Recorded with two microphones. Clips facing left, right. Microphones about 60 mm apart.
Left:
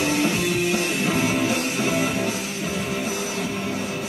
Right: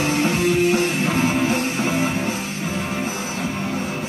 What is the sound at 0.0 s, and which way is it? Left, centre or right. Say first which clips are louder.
Music: right 2 dB; right.